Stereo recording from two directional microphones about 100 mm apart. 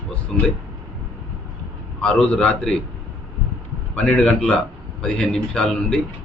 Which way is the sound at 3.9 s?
15° left (ahead or behind).